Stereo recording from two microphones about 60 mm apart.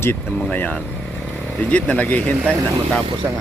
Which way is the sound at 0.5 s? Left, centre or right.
Left.